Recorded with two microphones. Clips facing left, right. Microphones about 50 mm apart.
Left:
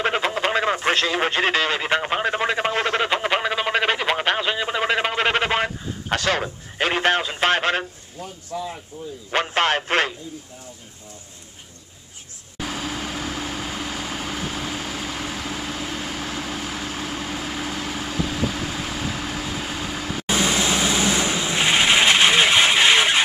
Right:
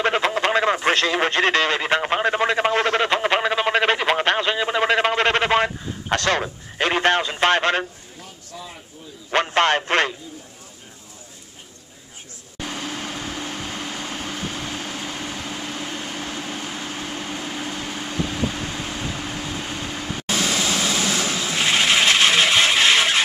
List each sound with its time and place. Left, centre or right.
0.0 s radio: centre
8.5 s a sound: left
9.3 s a man's voice: centre
12.5 s vehicle: centre
20.2 s vehicle: centre